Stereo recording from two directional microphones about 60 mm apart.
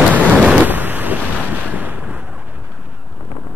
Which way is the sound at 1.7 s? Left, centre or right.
Right.